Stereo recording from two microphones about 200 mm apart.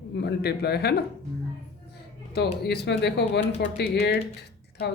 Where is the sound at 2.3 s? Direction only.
55° left (ahead or behind).